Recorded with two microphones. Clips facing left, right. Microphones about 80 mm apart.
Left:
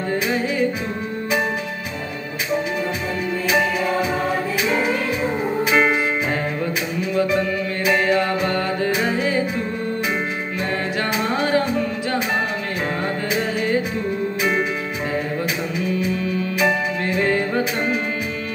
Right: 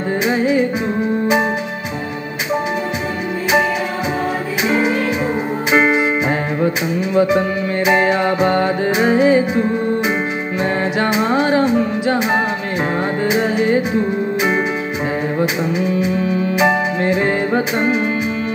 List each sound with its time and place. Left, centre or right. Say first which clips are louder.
0.1 s music: right 7 dB; centre
5.7 s music: right 4 dB; right
7.0 s music: right 5 dB; centre
16.5 s music: right 4 dB; right